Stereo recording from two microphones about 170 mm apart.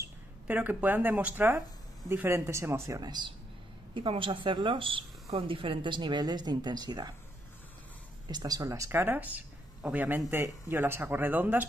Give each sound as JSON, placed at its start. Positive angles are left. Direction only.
{"t": 0.5, "sound": "speech", "side_deg": -10}
{"t": 8.3, "sound": "speech", "side_deg": -25}